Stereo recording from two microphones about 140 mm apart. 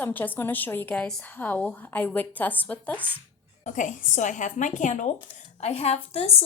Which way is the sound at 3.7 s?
65° left (ahead or behind).